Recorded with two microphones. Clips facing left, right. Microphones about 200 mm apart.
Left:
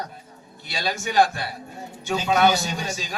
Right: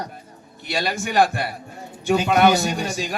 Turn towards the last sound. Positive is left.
turn(degrees=-55)  # may be behind; listen again after turning